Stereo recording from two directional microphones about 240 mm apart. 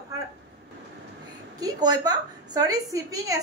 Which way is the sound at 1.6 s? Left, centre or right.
Centre.